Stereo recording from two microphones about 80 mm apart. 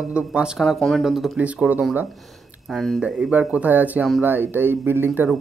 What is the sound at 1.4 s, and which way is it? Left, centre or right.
Speech, centre.